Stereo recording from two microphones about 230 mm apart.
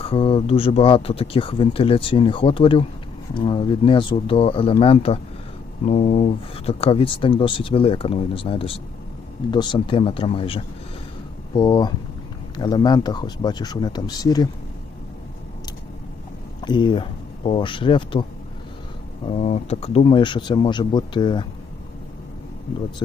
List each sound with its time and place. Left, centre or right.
0.0 s speech: left
16.6 s speech: centre